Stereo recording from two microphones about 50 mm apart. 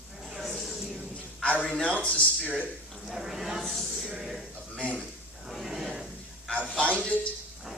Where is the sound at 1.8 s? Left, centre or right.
Left.